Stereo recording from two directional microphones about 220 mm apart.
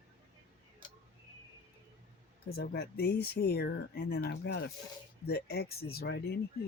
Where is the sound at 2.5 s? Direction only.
45° left (ahead or behind).